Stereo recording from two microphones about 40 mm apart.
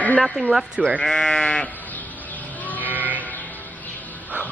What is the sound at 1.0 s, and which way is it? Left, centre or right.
Sheep, centre.